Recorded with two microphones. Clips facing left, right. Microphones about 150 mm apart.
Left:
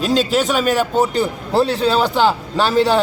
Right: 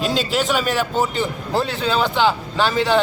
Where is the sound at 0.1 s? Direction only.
40° left (ahead or behind).